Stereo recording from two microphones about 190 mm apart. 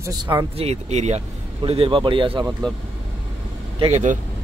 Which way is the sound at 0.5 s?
35° right (ahead or behind).